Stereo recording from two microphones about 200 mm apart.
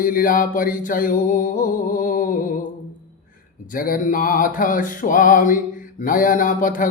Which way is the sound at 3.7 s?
45° left (ahead or behind).